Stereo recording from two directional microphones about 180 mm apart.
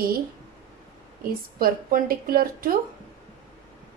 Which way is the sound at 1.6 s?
55° right (ahead or behind).